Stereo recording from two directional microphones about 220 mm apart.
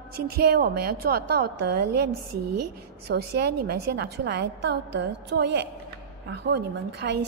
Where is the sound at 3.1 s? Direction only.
45° right (ahead or behind).